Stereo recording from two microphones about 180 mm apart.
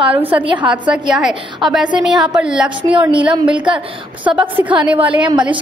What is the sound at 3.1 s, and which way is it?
Speech, 25° right (ahead or behind).